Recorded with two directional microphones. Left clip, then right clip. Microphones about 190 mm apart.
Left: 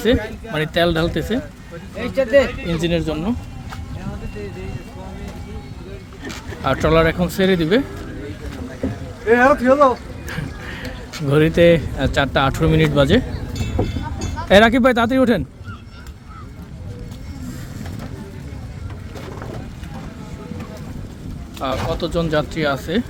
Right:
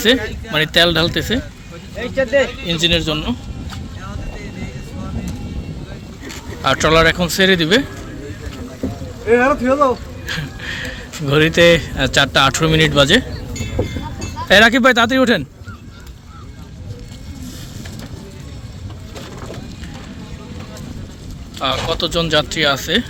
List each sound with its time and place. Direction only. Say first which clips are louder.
0.0 s speech: right 3 dB; centre (ahead or behind)
2.0 s speech: even; 75° left (ahead or behind)
2.6 s speech: right 5 dB; 5° left (ahead or behind)
6.6 s speech: right 3 dB; 5° left (ahead or behind)
9.2 s speech: even; 75° left (ahead or behind)
10.2 s speech: right 7 dB; 5° left (ahead or behind)
14.4 s speech: right 2 dB; 5° left (ahead or behind)
21.6 s speech: right 4 dB; 5° left (ahead or behind)